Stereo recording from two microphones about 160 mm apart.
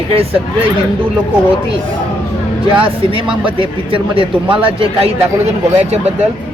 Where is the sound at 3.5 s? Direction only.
35° right (ahead or behind).